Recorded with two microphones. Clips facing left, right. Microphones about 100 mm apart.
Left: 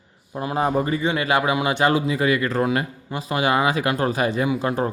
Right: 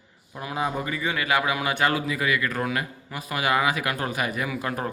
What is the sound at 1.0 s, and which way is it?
A man's voice, 25° left (ahead or behind).